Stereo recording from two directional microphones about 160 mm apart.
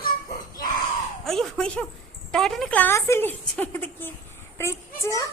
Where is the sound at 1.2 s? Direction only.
Centre (ahead or behind).